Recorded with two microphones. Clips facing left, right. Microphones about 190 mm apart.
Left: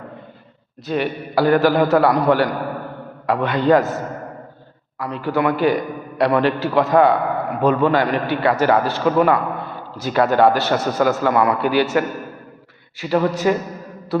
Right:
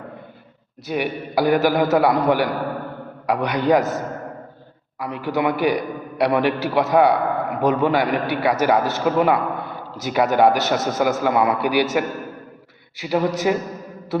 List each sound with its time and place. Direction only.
0.9 s a man's voice: 15° right (ahead or behind)
3.2 s a man's voice: 15° right (ahead or behind)